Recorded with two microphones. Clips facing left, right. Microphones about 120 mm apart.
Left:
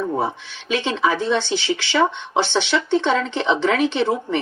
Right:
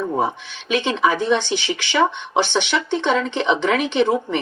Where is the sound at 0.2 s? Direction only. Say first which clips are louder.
Right 2 dB; 15° right (ahead or behind).